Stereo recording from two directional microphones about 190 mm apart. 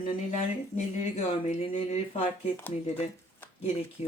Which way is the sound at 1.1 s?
35° left (ahead or behind).